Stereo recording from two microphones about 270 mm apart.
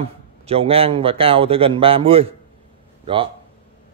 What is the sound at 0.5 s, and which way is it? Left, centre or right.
A man's voice, right.